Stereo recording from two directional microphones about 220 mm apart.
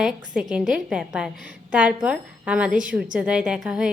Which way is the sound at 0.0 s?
Centre (ahead or behind).